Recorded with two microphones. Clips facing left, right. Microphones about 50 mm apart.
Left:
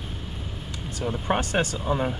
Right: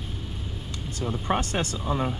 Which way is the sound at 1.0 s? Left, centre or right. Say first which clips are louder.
Left 1 dB; left.